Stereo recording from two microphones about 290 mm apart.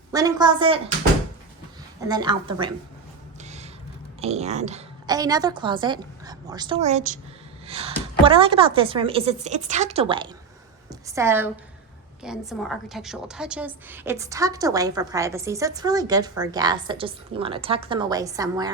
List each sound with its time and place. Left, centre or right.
0.1 s a woman's voice: centre
2.0 s a woman's voice: centre
3.4 s a sound: right
4.2 s a woman's voice: right